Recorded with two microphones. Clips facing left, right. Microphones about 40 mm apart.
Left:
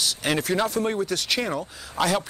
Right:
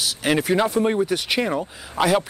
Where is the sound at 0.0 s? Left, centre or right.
Centre.